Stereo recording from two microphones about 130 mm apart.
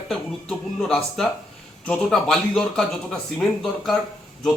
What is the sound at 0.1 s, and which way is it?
Speech, 5° left (ahead or behind).